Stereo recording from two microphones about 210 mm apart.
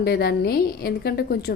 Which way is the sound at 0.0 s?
50° left (ahead or behind).